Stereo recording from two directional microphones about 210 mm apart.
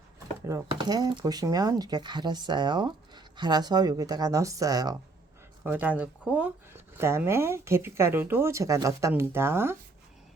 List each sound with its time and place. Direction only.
0.4 s speech: 15° right (ahead or behind)